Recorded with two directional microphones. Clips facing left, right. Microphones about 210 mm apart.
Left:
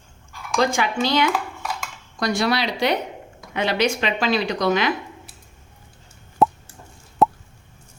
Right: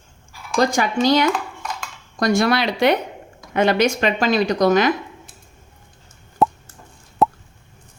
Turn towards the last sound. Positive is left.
turn(degrees=0)  # may be behind; listen again after turning